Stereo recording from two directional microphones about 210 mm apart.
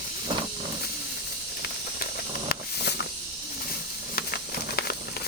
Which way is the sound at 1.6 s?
50° left (ahead or behind).